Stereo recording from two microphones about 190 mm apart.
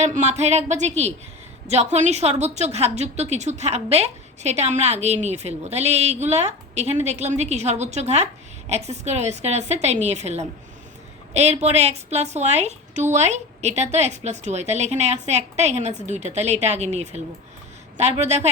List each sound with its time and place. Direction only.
0.0 s a woman's voice: 35° right (ahead or behind)